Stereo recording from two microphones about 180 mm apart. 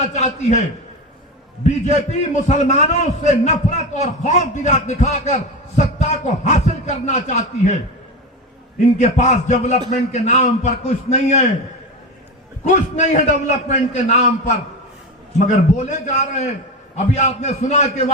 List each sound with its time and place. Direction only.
0.0 s a man's voice: 40° left (ahead or behind)
1.6 s a man's voice: 40° left (ahead or behind)
9.0 s a man's voice: 40° left (ahead or behind)
12.6 s a man's voice: 40° left (ahead or behind)
15.4 s a man's voice: 45° left (ahead or behind)